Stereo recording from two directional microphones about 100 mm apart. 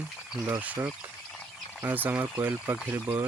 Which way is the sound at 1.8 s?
20° right (ahead or behind).